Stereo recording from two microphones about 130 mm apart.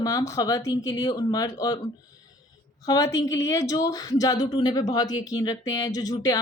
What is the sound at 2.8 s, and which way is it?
Speech, 25° left (ahead or behind).